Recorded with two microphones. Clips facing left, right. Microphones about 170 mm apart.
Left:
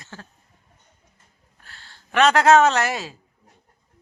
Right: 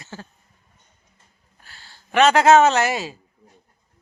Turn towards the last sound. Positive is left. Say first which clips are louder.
# right 2 dB
turn(degrees=0)  # may be behind; listen again after turning